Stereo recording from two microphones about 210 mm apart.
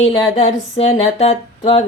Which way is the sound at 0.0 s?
30° left (ahead or behind).